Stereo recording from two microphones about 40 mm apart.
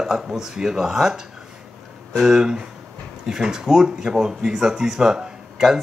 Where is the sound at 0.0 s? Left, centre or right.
Centre.